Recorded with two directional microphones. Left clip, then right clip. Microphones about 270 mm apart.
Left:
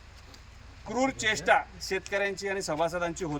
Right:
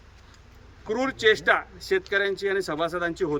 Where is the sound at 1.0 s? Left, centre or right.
Centre.